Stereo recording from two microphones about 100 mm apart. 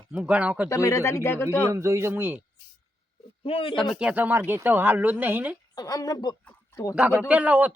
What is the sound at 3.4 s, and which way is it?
Speech, 65° left (ahead or behind).